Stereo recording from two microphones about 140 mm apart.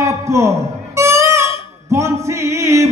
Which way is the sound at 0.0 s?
20° right (ahead or behind).